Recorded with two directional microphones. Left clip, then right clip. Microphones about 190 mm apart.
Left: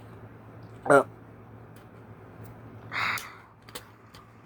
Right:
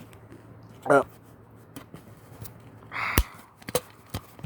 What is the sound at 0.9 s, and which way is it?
Speech, 10° right (ahead or behind).